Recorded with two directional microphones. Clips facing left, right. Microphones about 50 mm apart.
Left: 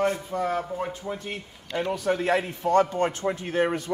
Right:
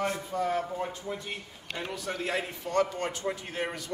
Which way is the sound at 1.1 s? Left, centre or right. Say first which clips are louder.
Left 3 dB; left.